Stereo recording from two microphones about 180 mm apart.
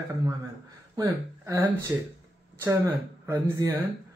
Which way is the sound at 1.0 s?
20° right (ahead or behind).